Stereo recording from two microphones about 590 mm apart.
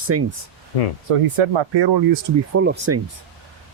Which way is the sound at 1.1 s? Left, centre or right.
Right.